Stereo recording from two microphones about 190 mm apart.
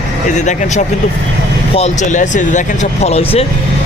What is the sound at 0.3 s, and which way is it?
Speech, 40° left (ahead or behind).